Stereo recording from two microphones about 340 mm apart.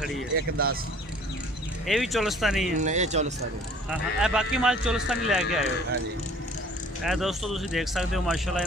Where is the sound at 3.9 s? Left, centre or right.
Centre.